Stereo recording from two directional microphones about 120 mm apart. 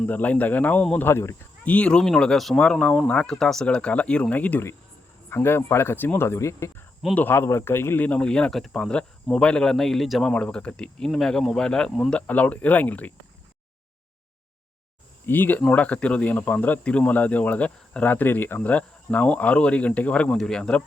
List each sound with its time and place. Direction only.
0.0 s speech: 15° left (ahead or behind)
1.0 s speech: 20° left (ahead or behind)
1.6 s speech: 10° left (ahead or behind)
15.3 s speech: 15° left (ahead or behind)